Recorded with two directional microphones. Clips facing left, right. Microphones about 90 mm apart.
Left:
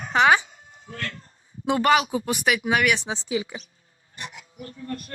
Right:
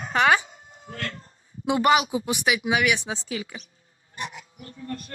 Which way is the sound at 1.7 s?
15° right (ahead or behind).